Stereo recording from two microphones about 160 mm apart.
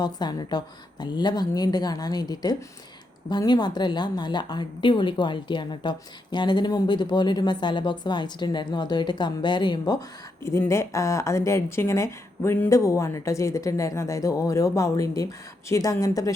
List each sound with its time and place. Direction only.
0.0 s a woman's voice: 25° left (ahead or behind)